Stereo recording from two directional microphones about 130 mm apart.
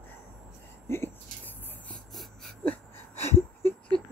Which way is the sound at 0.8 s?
20° left (ahead or behind).